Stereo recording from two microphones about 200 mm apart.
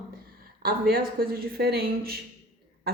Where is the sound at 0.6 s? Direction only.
50° right (ahead or behind).